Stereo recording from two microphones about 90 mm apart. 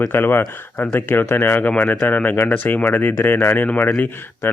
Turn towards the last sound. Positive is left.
turn(degrees=20)  # may be behind; listen again after turning